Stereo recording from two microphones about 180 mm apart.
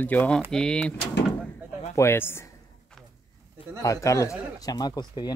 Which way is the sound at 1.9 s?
15° left (ahead or behind).